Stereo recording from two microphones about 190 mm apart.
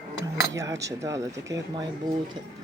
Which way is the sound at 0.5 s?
15° right (ahead or behind).